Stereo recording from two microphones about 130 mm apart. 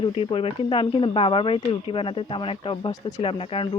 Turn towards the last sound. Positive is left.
turn(degrees=45)  # may be behind; listen again after turning